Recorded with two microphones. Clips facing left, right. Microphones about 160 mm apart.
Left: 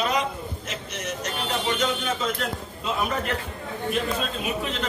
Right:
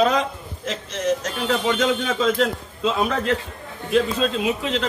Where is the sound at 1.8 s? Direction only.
90° right.